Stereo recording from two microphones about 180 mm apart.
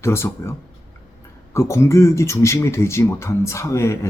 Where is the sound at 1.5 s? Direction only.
15° left (ahead or behind).